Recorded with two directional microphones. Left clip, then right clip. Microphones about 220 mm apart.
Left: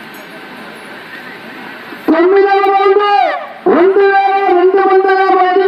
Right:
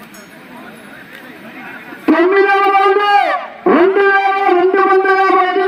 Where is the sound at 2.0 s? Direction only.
50° right (ahead or behind).